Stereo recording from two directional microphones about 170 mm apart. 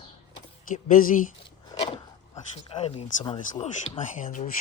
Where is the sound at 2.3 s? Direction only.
40° left (ahead or behind).